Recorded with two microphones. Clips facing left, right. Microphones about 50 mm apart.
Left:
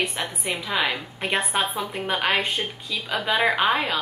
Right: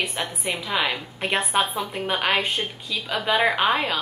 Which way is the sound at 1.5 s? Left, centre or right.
Centre.